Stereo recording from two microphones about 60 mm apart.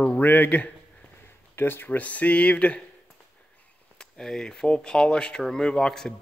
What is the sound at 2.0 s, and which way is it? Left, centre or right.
Speech, left.